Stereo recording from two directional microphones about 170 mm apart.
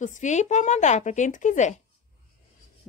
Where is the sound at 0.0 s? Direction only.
45° left (ahead or behind).